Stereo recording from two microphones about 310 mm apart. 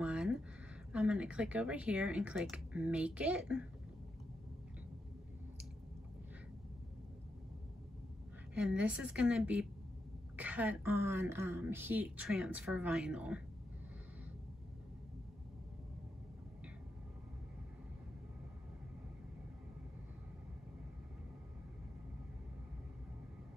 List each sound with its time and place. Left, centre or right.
0.0 s a sound: centre
0.9 s a woman's voice: centre
8.5 s a woman's voice: centre